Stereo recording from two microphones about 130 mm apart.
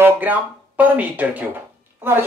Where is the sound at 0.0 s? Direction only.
15° right (ahead or behind).